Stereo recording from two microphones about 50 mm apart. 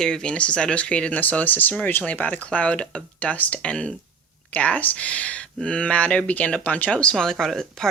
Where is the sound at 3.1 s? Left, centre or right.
Left.